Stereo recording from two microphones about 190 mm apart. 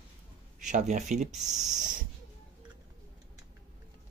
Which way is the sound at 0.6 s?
40° right (ahead or behind).